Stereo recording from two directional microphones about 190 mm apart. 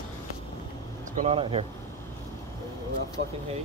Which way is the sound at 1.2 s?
30° right (ahead or behind).